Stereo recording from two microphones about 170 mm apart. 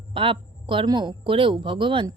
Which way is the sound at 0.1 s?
30° right (ahead or behind).